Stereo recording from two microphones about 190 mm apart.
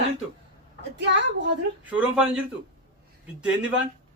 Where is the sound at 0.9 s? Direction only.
65° right (ahead or behind).